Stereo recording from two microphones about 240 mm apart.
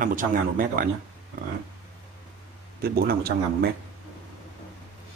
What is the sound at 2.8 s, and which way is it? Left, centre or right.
Speech, right.